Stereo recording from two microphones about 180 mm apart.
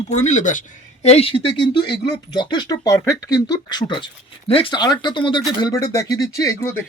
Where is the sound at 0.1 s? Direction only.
40° left (ahead or behind).